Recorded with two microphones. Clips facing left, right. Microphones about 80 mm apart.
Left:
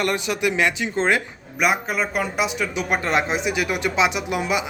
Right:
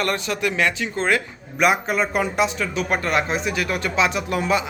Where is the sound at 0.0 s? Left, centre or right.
Centre.